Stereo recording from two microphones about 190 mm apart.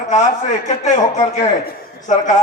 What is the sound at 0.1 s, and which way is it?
A man's voice, 40° left (ahead or behind).